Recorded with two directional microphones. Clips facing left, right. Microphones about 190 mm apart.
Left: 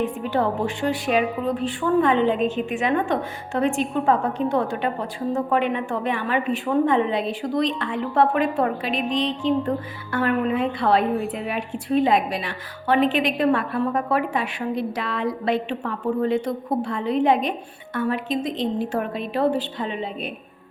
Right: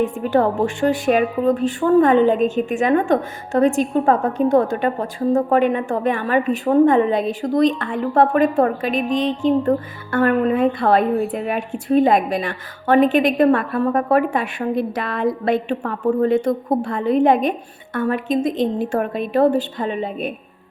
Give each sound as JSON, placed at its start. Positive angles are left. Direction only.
{"t": 0.0, "sound": "a woman's voice", "side_deg": -50}